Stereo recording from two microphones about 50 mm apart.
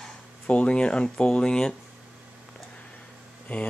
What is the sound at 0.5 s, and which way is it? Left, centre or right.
Speech, left.